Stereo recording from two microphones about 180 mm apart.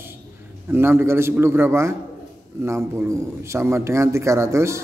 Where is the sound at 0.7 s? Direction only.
15° right (ahead or behind).